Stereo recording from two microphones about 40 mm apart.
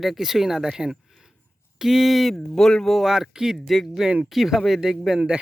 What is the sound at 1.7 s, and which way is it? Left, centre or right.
Speech, centre.